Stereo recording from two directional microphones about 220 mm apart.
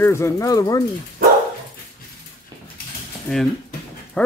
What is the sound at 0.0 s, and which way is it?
Speech, 10° left (ahead or behind).